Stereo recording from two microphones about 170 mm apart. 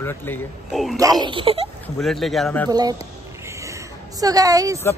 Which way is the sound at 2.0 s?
Centre (ahead or behind).